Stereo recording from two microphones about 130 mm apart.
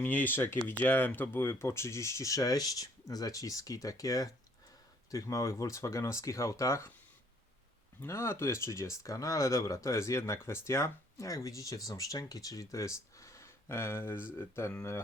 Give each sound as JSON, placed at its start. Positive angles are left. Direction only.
{"t": 0.0, "sound": "speech", "side_deg": 15}
{"t": 8.0, "sound": "speech", "side_deg": 20}